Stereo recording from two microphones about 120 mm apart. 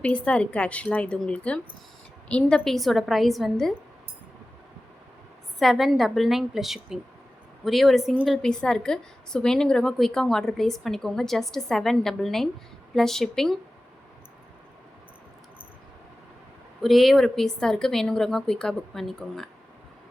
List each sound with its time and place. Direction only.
0.0 s a woman's voice: 10° left (ahead or behind)
5.5 s a woman's voice: centre (ahead or behind)
8.4 s a woman's voice: 5° left (ahead or behind)
16.8 s a woman's voice: centre (ahead or behind)